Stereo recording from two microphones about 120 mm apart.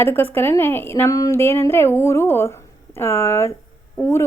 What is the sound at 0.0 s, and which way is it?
Speech, 15° left (ahead or behind).